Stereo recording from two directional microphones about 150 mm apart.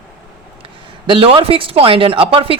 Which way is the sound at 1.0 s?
35° right (ahead or behind).